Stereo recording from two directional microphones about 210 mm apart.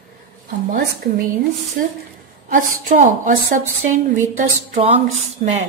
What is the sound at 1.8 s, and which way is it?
A woman's voice, 40° right (ahead or behind).